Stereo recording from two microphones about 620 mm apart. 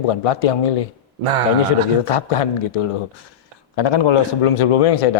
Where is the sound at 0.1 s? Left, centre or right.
Left.